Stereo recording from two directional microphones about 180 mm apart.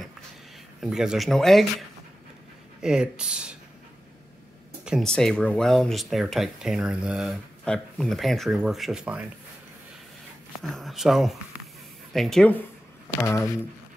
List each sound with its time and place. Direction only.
0.7 s speech: 5° right (ahead or behind)
4.8 s speech: centre (ahead or behind)
10.6 s speech: centre (ahead or behind)